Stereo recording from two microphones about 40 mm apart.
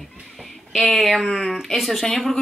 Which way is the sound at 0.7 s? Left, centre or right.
Centre.